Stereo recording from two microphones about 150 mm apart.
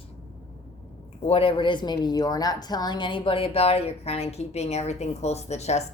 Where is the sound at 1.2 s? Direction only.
40° left (ahead or behind).